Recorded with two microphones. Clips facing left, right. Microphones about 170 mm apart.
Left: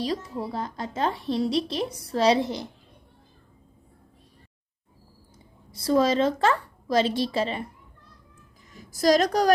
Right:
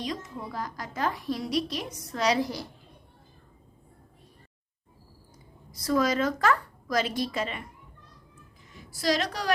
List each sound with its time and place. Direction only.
0.0 s speech: 30° left (ahead or behind)
5.7 s speech: 30° left (ahead or behind)
8.7 s a woman's voice: 40° left (ahead or behind)